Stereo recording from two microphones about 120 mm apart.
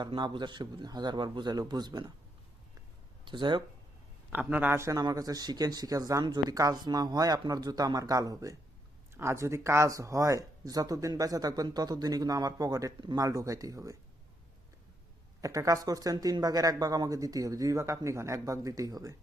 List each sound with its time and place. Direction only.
0.0 s speech: 40° right (ahead or behind)
3.2 s speech: 40° right (ahead or behind)
4.3 s speech: 15° right (ahead or behind)
15.4 s speech: 30° right (ahead or behind)